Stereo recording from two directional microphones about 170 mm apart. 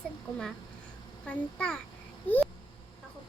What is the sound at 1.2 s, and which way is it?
Speech, 5° left (ahead or behind).